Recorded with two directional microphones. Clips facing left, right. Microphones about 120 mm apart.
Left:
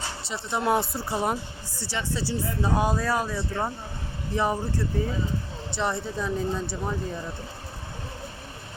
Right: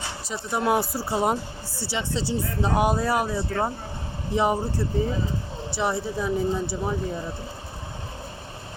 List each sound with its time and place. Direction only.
0.3 s speech: 5° right (ahead or behind)
1.1 s speech: 20° right (ahead or behind)
5.7 s speech: 10° right (ahead or behind)